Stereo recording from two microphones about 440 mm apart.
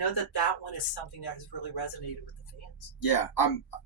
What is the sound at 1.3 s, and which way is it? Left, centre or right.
Speech, left.